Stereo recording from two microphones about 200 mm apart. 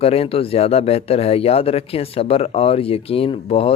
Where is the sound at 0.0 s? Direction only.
30° left (ahead or behind).